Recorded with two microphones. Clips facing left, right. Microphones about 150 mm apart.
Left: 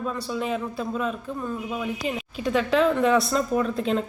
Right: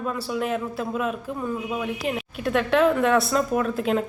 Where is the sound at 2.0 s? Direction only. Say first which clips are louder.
Right 2 dB; 60° right (ahead or behind).